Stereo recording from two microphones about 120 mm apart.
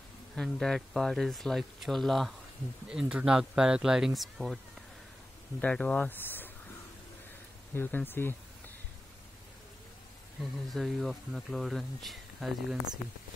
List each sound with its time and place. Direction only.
0.4 s speech: 5° left (ahead or behind)
5.6 s speech: 10° left (ahead or behind)
7.7 s speech: 15° left (ahead or behind)
10.7 s speech: centre (ahead or behind)